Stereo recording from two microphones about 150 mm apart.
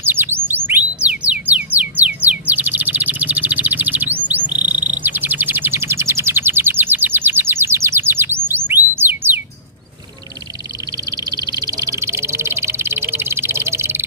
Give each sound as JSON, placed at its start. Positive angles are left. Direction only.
{"t": 0.0, "sound": "chirp", "side_deg": -15}
{"t": 4.7, "sound": "insect", "side_deg": -55}
{"t": 5.0, "sound": "bird", "side_deg": -10}
{"t": 11.1, "sound": "bird", "side_deg": -25}